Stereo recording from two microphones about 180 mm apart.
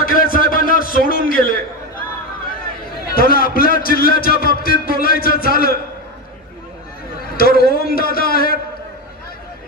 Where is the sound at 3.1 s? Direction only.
55° left (ahead or behind).